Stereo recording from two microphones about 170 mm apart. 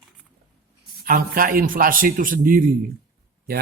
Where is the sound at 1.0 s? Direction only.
55° right (ahead or behind).